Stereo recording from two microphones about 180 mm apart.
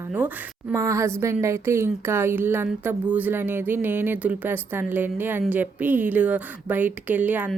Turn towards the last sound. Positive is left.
turn(degrees=-10)  # may be behind; listen again after turning